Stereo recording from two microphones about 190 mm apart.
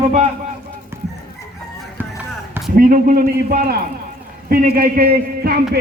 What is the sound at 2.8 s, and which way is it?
Speech, 45° right (ahead or behind).